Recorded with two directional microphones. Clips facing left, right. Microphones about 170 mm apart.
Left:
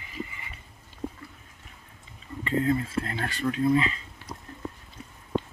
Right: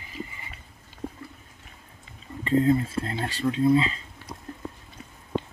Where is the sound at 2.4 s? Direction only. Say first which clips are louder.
Right 4 dB; 30° right (ahead or behind).